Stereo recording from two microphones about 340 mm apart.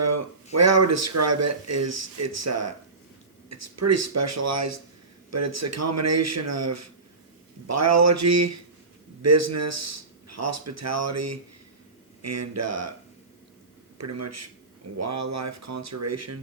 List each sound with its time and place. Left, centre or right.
0.5 s speech: right
14.0 s speech: right